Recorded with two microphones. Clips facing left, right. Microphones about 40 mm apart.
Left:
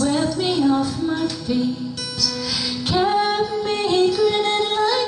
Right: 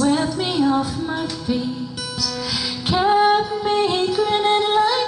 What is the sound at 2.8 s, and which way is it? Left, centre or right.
Music, centre.